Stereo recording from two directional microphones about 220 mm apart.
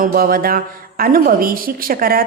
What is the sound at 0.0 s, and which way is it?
A woman's voice, 40° right (ahead or behind).